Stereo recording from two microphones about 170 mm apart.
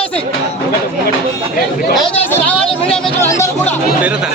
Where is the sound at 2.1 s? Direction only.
10° left (ahead or behind).